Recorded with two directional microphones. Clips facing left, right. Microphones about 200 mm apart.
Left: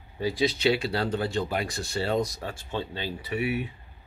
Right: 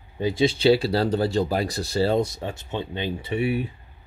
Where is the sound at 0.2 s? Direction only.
25° right (ahead or behind).